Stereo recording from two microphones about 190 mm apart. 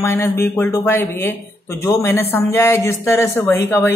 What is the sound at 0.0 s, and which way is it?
A man's voice, 15° left (ahead or behind).